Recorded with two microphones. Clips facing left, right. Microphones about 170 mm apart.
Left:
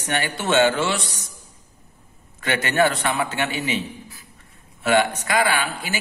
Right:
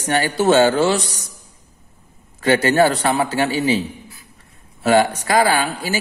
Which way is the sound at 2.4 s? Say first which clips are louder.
Right 6 dB; 35° right (ahead or behind).